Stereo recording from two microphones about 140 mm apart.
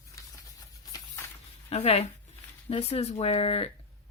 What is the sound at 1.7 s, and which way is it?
Speech, 45° left (ahead or behind).